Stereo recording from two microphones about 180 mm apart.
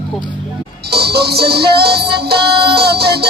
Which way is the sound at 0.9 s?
60° right (ahead or behind).